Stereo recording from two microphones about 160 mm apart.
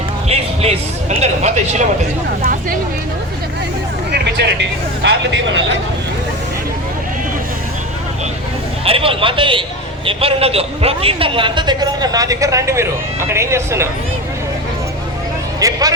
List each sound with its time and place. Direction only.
0.3 s music: 40° right (ahead or behind)
1.2 s speech: 45° right (ahead or behind)
2.4 s speech: 65° right (ahead or behind)
4.1 s vehicle: 90° right
5.0 s speech: 90° right
8.8 s a man's voice: 35° right (ahead or behind); by 13.8 s 15° right (ahead or behind)
15.6 s music: 20° right (ahead or behind)